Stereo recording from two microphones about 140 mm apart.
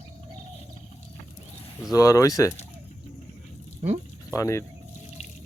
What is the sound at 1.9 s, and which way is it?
Speech, 25° left (ahead or behind).